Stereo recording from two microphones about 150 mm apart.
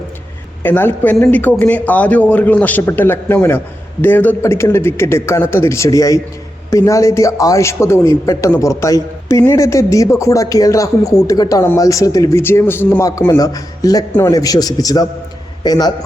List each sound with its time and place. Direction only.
0.6 s a man's voice: 15° left (ahead or behind)